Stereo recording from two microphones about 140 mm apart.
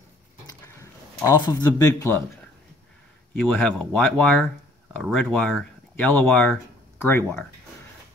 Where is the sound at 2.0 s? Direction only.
15° left (ahead or behind).